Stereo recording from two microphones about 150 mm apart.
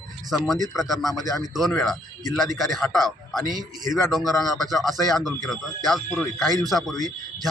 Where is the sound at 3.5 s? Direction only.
25° right (ahead or behind).